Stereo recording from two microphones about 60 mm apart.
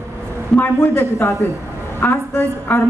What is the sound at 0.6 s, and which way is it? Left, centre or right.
Speech, left.